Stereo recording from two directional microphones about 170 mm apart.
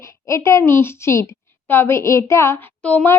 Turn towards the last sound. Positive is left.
turn(degrees=10)  # may be behind; listen again after turning